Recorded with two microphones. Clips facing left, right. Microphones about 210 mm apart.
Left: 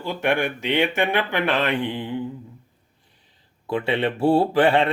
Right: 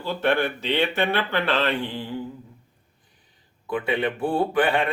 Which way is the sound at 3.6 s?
25° left (ahead or behind).